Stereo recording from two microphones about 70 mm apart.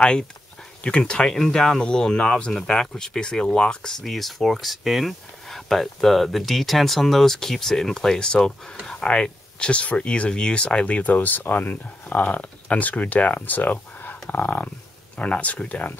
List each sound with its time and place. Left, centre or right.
0.8 s speech: centre